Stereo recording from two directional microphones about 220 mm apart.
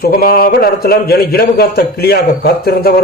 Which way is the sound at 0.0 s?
45° left (ahead or behind).